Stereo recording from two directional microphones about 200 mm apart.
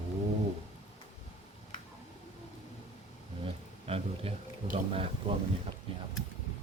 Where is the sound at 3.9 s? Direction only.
30° right (ahead or behind).